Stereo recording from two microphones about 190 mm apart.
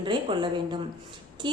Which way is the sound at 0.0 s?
25° right (ahead or behind).